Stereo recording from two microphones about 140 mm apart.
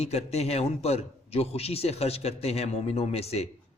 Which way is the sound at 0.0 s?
50° left (ahead or behind).